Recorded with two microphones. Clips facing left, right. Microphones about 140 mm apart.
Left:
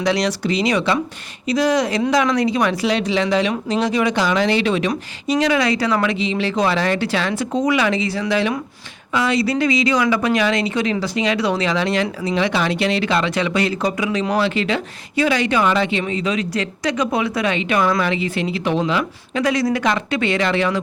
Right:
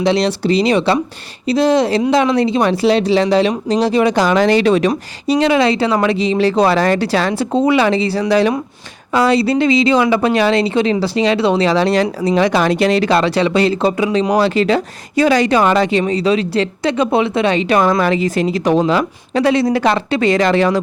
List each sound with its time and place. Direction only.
0.0 s speech: 25° right (ahead or behind); by 5.4 s 40° right (ahead or behind)
5.4 s speech: 25° right (ahead or behind)